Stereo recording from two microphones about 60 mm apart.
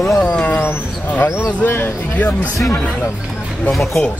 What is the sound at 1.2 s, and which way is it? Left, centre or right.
Speech, left.